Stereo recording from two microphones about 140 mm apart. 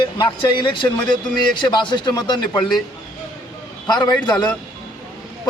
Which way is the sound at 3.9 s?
30° left (ahead or behind).